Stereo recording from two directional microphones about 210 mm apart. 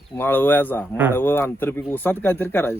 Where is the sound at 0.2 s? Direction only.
10° left (ahead or behind).